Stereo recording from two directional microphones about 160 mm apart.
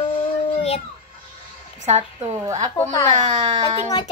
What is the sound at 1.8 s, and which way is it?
Speech, 40° right (ahead or behind).